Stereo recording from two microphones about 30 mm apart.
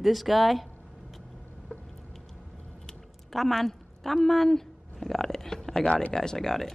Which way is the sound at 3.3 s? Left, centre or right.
Centre.